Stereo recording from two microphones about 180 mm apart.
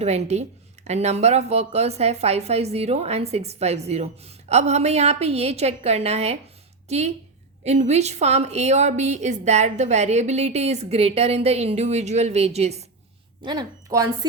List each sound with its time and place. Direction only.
0.0 s a woman's voice: 35° right (ahead or behind)
13.4 s speech: 25° right (ahead or behind)